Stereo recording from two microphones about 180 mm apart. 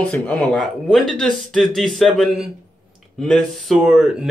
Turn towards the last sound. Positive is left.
turn(degrees=-5)  # may be behind; listen again after turning